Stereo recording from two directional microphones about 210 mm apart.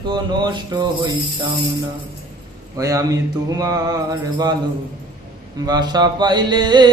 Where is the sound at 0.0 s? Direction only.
20° right (ahead or behind).